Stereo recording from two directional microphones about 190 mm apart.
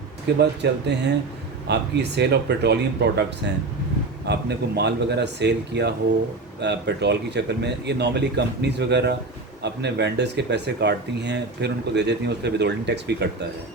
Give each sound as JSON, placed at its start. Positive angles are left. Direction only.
{"t": 0.3, "sound": "speech", "side_deg": -65}
{"t": 4.3, "sound": "speech", "side_deg": -60}